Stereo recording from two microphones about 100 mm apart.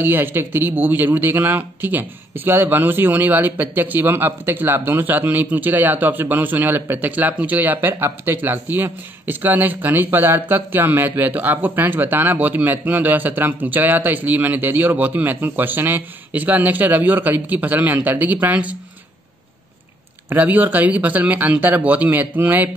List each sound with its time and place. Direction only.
0.0 s speech: 20° right (ahead or behind)
20.2 s speech: 20° right (ahead or behind)